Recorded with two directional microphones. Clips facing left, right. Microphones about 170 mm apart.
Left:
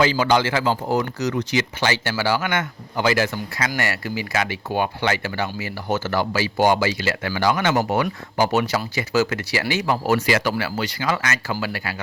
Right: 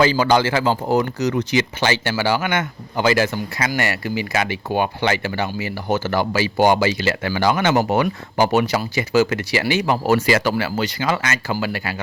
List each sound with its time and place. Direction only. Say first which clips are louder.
0.0 s speech: right 2 dB; 40° right (ahead or behind); by 11.9 s 25° right (ahead or behind)